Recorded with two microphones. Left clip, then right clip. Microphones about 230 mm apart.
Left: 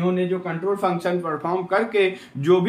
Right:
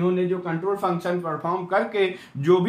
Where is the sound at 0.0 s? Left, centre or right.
Right.